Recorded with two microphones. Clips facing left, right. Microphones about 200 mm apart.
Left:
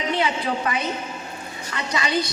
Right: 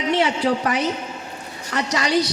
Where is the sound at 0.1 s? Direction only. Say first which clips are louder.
Right 6 dB; 80° right.